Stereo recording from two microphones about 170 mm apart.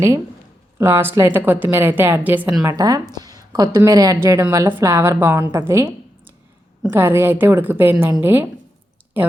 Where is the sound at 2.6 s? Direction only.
20° right (ahead or behind).